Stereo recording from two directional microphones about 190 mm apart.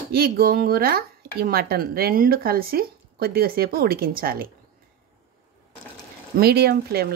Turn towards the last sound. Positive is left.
turn(degrees=-55)  # may be behind; listen again after turning